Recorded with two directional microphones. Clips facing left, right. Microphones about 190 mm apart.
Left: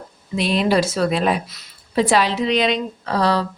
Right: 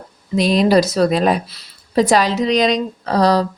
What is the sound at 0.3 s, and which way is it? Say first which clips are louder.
Speech: right 5 dB; 40° right (ahead or behind).